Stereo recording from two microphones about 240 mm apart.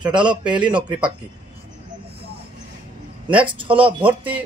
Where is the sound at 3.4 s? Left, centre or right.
Right.